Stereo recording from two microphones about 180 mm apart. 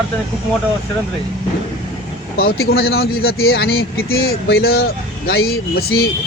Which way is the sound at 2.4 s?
60° left (ahead or behind).